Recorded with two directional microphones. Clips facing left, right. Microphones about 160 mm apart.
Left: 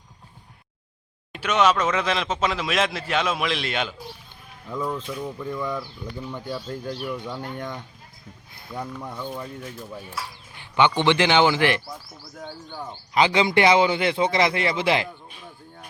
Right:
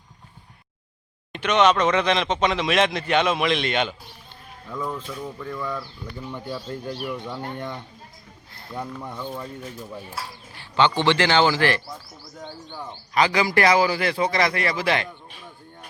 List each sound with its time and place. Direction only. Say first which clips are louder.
1.3 s speech: right 2 dB; 5° left (ahead or behind)
6.5 s speech: even; 5° right (ahead or behind)
8.8 s speech: even; 5° right (ahead or behind)
10.8 s speech: even; 15° left (ahead or behind)
12.4 s speech: left 1 dB; 5° left (ahead or behind)
13.1 s a man's voice: left 1 dB; 20° left (ahead or behind)